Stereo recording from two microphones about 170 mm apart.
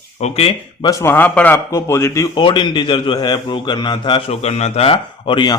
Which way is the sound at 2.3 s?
25° left (ahead or behind).